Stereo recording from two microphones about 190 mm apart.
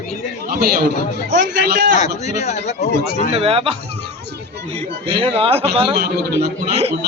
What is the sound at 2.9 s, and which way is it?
Speech, 60° left (ahead or behind).